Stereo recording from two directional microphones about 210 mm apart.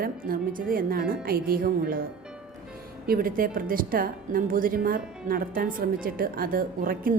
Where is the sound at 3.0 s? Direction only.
45° right (ahead or behind).